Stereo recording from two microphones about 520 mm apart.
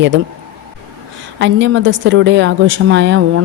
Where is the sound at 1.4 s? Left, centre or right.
Right.